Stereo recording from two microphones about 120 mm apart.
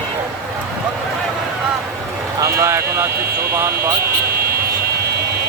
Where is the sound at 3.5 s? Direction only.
25° right (ahead or behind).